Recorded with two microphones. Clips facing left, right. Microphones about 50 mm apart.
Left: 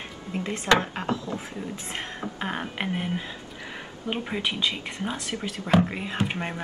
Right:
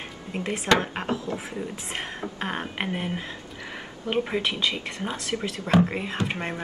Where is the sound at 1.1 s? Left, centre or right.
Right.